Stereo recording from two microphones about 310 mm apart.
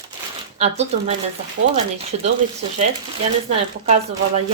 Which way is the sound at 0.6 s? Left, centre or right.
Right.